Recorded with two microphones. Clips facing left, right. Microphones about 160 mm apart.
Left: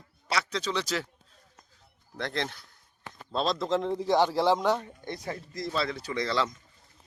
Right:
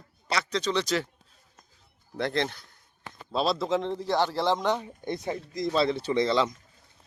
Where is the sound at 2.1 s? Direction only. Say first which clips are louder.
Right 5 dB; 5° right (ahead or behind).